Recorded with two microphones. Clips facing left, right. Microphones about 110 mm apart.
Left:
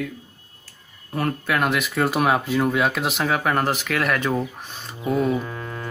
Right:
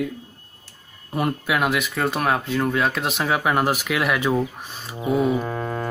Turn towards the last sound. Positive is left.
turn(degrees=-40)  # may be behind; listen again after turning